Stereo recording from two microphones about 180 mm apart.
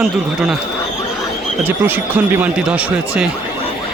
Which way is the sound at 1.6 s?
10° right (ahead or behind).